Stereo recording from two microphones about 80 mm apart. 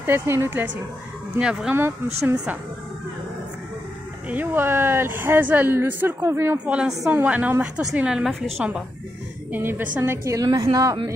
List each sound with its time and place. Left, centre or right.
0.0 s a woman's voice: right
1.4 s a woman's voice: centre
1.8 s speech: right
4.3 s a woman's voice: right
6.6 s a woman's voice: centre
8.3 s a woman's voice: centre
9.5 s a woman's voice: right
10.2 s a woman's voice: right